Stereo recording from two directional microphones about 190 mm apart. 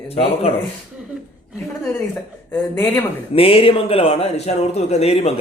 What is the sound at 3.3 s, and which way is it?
Speech, 30° left (ahead or behind).